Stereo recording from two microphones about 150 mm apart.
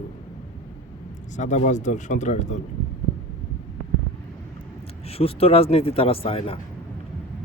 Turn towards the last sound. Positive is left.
turn(degrees=40)  # may be behind; listen again after turning